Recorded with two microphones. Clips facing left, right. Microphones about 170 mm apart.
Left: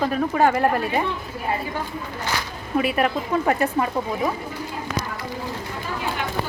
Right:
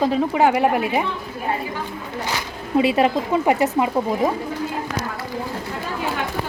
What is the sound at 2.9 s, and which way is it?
Speech, 20° right (ahead or behind).